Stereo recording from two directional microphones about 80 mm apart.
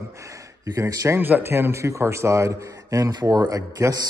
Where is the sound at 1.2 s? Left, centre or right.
Right.